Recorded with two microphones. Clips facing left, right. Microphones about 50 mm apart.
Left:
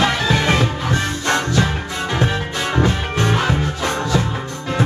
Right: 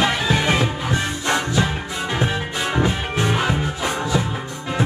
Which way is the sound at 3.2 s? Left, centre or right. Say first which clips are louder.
Left 2 dB; centre.